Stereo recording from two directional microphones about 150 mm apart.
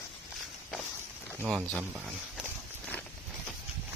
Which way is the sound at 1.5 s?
10° right (ahead or behind).